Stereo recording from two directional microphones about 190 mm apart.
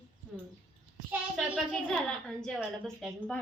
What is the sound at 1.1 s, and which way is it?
Speech, 5° right (ahead or behind).